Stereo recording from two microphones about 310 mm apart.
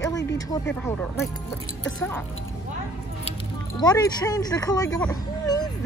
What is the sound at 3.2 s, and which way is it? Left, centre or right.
Speech, centre.